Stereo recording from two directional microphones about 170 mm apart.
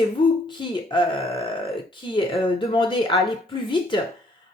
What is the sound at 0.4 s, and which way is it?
Speech, 25° left (ahead or behind).